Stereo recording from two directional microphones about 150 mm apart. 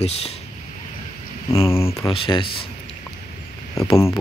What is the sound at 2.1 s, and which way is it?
Speech, 35° left (ahead or behind).